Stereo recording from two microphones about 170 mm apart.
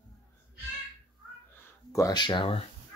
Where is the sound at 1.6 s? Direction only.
15° left (ahead or behind).